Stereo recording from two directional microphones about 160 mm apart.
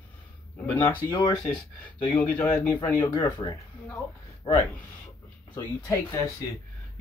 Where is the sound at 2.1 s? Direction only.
10° left (ahead or behind); by 4.6 s 30° left (ahead or behind).